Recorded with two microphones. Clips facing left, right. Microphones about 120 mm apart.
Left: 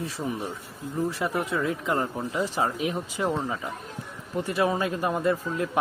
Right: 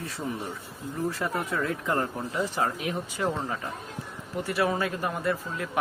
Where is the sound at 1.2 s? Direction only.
10° left (ahead or behind).